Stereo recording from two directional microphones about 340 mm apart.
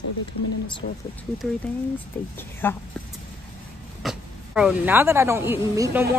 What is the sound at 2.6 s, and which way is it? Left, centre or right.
Speech, centre.